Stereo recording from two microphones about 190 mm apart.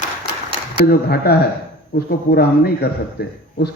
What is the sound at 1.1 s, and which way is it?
A man's voice, 55° left (ahead or behind).